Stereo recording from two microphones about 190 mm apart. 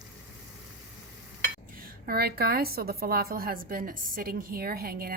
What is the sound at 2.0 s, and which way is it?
A woman's voice, 55° right (ahead or behind).